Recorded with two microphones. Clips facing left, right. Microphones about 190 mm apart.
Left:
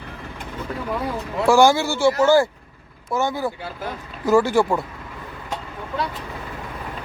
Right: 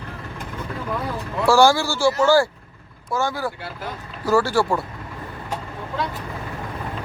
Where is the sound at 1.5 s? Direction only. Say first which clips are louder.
Left 1 dB; 20° left (ahead or behind).